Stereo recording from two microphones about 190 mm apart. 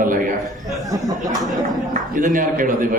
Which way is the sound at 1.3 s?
Centre (ahead or behind).